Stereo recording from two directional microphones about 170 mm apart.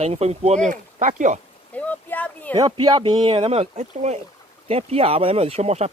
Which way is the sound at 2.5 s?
25° right (ahead or behind).